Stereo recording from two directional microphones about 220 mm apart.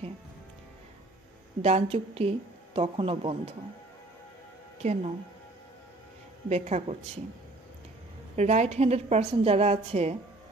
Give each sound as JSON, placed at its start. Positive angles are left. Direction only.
{"t": 1.6, "sound": "a woman's voice", "side_deg": -30}
{"t": 4.8, "sound": "a woman's voice", "side_deg": -30}
{"t": 6.5, "sound": "speech", "side_deg": -30}
{"t": 8.4, "sound": "a woman's voice", "side_deg": -30}